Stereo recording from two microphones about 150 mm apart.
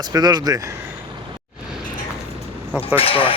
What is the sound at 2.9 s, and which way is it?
Speech, 40° left (ahead or behind).